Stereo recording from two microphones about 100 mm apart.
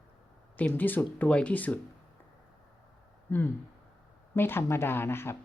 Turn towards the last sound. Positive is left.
turn(degrees=25)  # may be behind; listen again after turning